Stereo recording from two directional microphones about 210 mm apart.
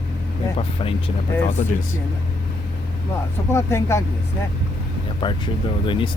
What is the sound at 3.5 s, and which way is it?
Speech, 10° left (ahead or behind).